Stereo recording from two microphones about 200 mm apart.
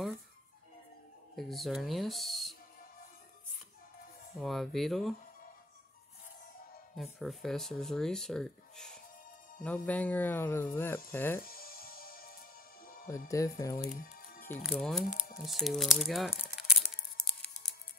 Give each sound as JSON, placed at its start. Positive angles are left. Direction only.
{"t": 1.3, "sound": "speech", "side_deg": 0}
{"t": 4.4, "sound": "speech", "side_deg": 0}
{"t": 7.0, "sound": "speech", "side_deg": 0}
{"t": 11.4, "sound": "music", "side_deg": 45}
{"t": 13.3, "sound": "speech", "side_deg": 15}
{"t": 13.8, "sound": "music", "side_deg": 45}
{"t": 14.6, "sound": "speech", "side_deg": 0}
{"t": 15.0, "sound": "speech", "side_deg": 50}
{"t": 15.4, "sound": "speech", "side_deg": 0}